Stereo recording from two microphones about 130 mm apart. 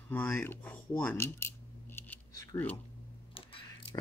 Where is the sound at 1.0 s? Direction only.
20° left (ahead or behind).